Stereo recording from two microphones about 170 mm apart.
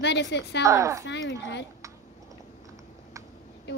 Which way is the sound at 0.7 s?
20° right (ahead or behind).